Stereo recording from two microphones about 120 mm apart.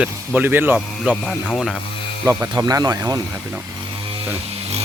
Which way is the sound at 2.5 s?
35° right (ahead or behind).